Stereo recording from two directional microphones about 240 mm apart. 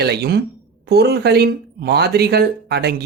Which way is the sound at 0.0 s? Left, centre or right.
Right.